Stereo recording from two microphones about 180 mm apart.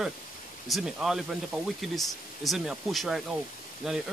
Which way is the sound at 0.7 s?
Centre (ahead or behind).